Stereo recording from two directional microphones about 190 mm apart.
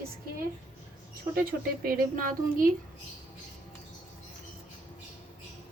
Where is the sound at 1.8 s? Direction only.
50° right (ahead or behind).